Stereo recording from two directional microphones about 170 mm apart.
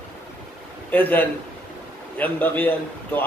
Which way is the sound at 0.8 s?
10° left (ahead or behind).